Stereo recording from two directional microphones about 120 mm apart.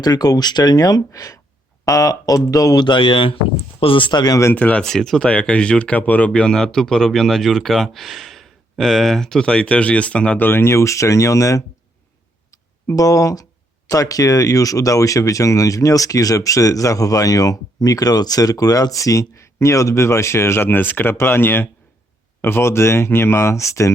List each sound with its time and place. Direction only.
0.0 s speech: 35° left (ahead or behind)
4.5 s speech: 10° left (ahead or behind); by 11.6 s 25° left (ahead or behind)
12.9 s speech: 30° left (ahead or behind)